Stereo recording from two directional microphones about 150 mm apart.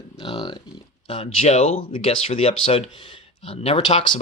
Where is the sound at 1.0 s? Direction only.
40° left (ahead or behind).